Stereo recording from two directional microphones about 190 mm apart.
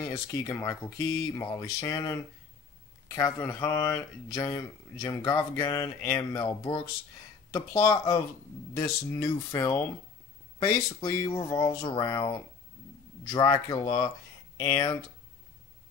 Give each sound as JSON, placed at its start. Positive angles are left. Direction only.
{"t": 0.3, "sound": "speech", "side_deg": 15}
{"t": 3.2, "sound": "speech", "side_deg": 15}